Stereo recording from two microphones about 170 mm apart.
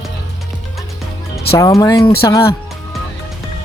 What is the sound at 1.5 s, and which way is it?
Speech, 20° left (ahead or behind).